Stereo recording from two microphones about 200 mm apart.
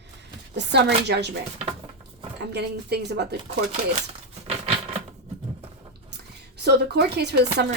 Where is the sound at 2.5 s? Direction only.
55° right (ahead or behind).